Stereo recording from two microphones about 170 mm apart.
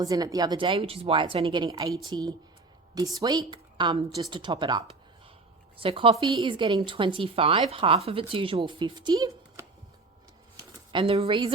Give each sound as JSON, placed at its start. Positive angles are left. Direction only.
{"t": 0.0, "sound": "a woman's voice", "side_deg": -20}
{"t": 5.8, "sound": "speech", "side_deg": -30}
{"t": 10.6, "sound": "speech", "side_deg": -30}